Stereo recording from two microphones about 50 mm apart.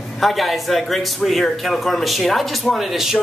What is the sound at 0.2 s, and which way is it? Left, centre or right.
Speech, centre.